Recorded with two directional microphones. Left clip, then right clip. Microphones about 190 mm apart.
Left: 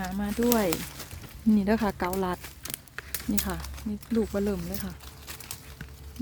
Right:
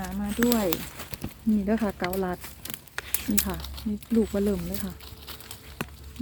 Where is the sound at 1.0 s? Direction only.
40° right (ahead or behind).